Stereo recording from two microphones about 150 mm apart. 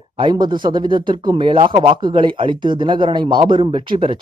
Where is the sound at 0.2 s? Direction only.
30° right (ahead or behind).